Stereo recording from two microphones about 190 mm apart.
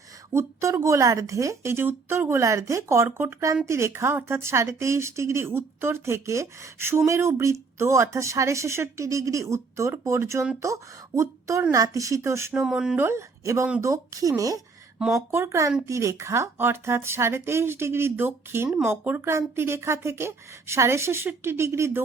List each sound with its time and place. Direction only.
0.3 s a woman's voice: 15° right (ahead or behind)
12.5 s a woman's voice: 5° right (ahead or behind)
13.9 s a woman's voice: 15° right (ahead or behind)
14.9 s a woman's voice: 5° right (ahead or behind)